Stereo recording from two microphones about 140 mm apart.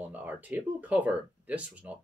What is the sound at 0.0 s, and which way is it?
Speech, 10° right (ahead or behind).